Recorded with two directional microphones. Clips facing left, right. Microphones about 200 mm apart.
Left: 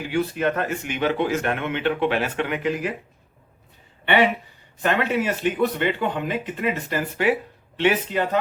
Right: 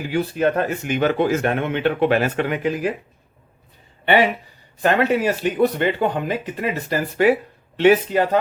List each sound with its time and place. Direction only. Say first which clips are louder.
0.1 s speech: right 3 dB; 35° right (ahead or behind)
4.8 s speech: right 4 dB; 40° right (ahead or behind)